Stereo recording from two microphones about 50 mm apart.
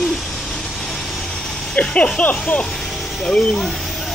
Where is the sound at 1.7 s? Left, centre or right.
Left.